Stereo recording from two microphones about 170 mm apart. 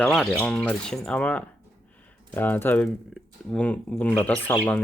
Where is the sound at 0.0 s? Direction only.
5° left (ahead or behind).